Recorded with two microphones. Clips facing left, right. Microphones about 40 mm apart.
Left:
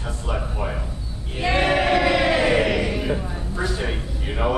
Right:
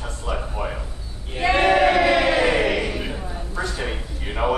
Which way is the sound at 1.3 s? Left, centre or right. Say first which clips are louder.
Right 3 dB; centre.